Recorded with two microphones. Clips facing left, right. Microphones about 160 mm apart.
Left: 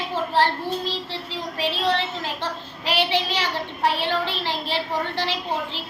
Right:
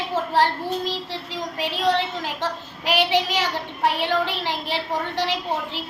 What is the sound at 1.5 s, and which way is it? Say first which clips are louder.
A woman's voice: right 1 dB; 10° right (ahead or behind).